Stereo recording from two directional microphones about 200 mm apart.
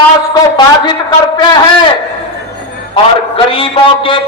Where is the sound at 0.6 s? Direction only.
20° left (ahead or behind).